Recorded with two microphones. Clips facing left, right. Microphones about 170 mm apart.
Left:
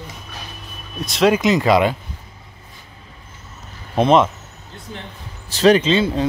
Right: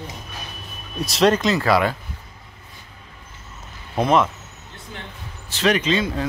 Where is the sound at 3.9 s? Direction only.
20° left (ahead or behind).